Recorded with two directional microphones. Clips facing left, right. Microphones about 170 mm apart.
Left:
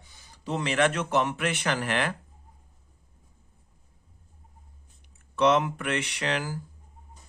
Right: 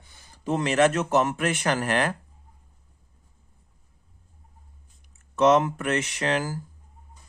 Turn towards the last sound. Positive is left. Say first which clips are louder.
# right 4 dB
turn(degrees=-40)  # may be behind; listen again after turning